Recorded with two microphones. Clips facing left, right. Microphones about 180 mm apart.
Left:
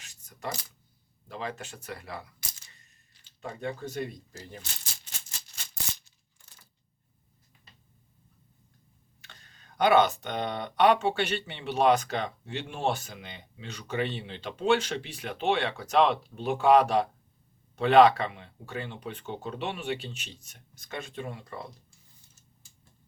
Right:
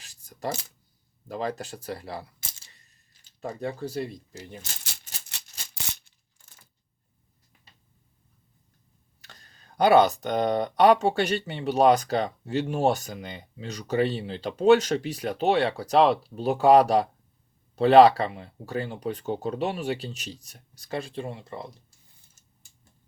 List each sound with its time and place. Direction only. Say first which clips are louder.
0.0 s a sound: right 5 dB; 35° right (ahead or behind)
1.3 s speech: right 6 dB; 40° right (ahead or behind)
4.8 s music: right 2 dB; 70° right (ahead or behind)
9.2 s speech: right 2 dB; 40° right (ahead or behind)